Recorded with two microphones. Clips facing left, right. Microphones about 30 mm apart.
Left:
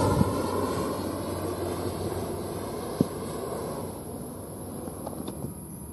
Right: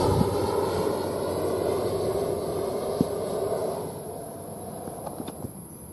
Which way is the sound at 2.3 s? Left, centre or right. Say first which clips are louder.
Right 5 dB; right.